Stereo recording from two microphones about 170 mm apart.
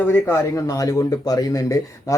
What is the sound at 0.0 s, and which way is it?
Speech, 10° left (ahead or behind).